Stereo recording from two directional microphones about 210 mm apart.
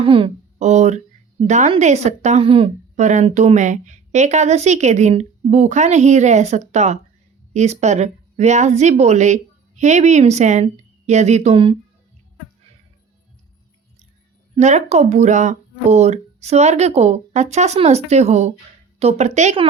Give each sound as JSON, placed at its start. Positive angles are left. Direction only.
{"t": 0.0, "sound": "a woman's voice", "side_deg": -25}
{"t": 14.5, "sound": "speech", "side_deg": -35}